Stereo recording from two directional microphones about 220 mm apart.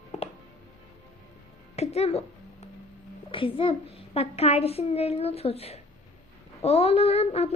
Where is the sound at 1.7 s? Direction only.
30° left (ahead or behind).